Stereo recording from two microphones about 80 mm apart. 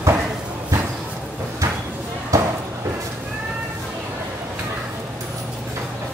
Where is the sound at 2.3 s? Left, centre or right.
Right.